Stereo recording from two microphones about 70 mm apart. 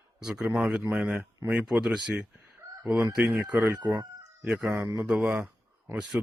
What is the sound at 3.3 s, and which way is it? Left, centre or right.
Speech, right.